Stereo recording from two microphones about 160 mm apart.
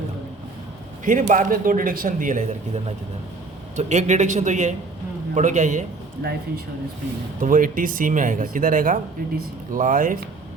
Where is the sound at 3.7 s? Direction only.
50° right (ahead or behind).